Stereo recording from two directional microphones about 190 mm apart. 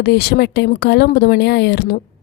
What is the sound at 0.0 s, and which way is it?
A woman's voice, 55° left (ahead or behind).